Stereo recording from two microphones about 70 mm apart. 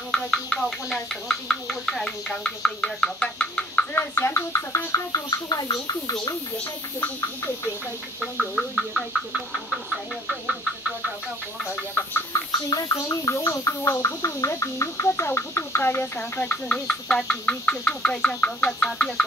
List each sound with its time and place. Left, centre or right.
0.1 s speech: centre
3.9 s frog: left
4.9 s a sound: left
8.2 s speech: centre
12.4 s bird: left
12.9 s gargling: left
13.5 s frog: left
16.2 s speech: left